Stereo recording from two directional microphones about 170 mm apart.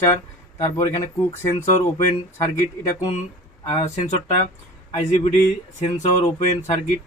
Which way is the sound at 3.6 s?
40° left (ahead or behind).